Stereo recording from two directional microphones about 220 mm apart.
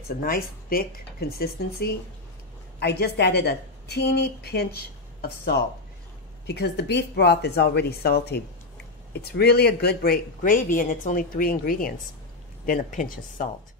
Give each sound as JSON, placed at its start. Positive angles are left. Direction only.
{"t": 0.2, "sound": "speech", "side_deg": 40}